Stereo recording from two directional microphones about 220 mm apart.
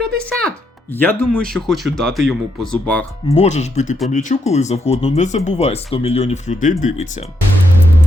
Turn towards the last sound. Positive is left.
turn(degrees=35)  # may be behind; listen again after turning